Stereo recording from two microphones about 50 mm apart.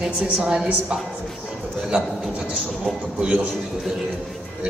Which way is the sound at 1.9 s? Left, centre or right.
Right.